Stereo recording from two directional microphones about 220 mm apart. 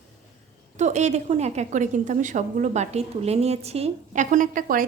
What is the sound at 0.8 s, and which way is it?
A woman's voice, 30° right (ahead or behind).